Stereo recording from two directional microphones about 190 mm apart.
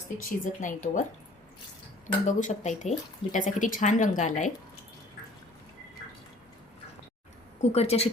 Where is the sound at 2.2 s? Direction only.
40° left (ahead or behind).